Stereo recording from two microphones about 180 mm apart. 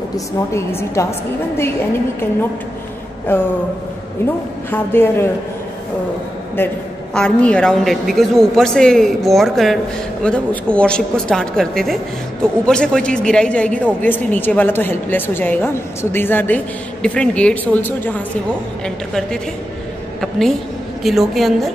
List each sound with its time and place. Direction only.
0.1 s a woman's voice: 15° left (ahead or behind)
3.3 s a woman's voice: 10° left (ahead or behind)
4.6 s a woman's voice: 10° left (ahead or behind)
7.2 s a woman's voice: 5° left (ahead or behind)
20.2 s a woman's voice: centre (ahead or behind)